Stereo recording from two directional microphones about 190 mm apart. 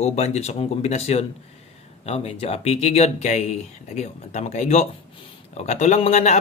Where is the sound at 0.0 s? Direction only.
35° left (ahead or behind).